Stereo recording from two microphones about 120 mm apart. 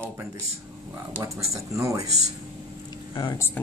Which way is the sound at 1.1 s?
25° right (ahead or behind).